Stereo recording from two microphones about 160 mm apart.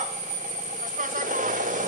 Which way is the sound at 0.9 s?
55° right (ahead or behind).